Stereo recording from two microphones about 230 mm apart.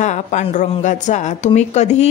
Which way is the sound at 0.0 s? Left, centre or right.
Left.